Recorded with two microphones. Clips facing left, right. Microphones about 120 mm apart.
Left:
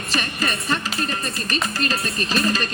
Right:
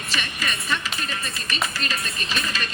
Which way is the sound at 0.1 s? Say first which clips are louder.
Left 5 dB; 40° left (ahead or behind).